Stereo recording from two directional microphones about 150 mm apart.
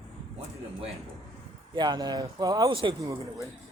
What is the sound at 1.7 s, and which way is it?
Speech, 30° right (ahead or behind).